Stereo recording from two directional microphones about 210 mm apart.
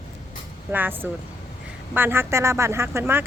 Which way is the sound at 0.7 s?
10° right (ahead or behind).